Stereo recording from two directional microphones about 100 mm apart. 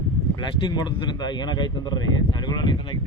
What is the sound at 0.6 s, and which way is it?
Speech, 45° left (ahead or behind).